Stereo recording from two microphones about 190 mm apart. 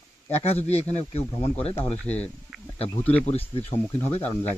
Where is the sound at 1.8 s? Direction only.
5° left (ahead or behind).